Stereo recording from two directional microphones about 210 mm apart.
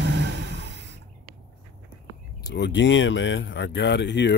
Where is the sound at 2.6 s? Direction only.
60° left (ahead or behind).